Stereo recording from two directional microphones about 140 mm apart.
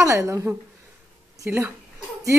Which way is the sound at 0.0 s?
20° right (ahead or behind).